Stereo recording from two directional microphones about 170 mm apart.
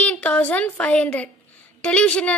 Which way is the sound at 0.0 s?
5° left (ahead or behind).